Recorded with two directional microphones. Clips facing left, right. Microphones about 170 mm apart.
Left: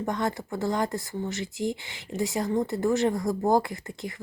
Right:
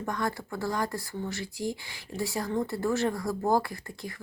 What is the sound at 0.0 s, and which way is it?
Speech, 20° left (ahead or behind).